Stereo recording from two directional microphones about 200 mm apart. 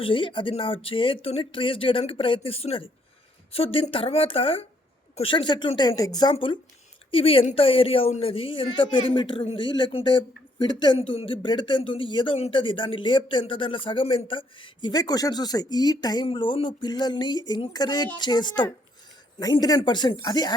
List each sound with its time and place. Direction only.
0.0 s speech: 25° left (ahead or behind)